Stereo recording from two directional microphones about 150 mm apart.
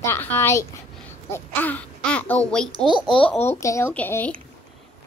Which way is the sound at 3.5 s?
20° left (ahead or behind).